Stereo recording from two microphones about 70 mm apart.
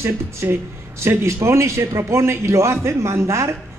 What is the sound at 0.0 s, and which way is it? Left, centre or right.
A man's voice, right.